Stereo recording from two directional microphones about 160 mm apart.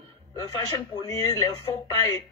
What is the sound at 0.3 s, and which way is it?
Speech, 25° left (ahead or behind).